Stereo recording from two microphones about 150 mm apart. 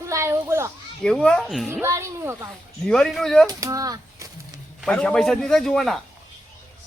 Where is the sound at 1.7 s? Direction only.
20° right (ahead or behind).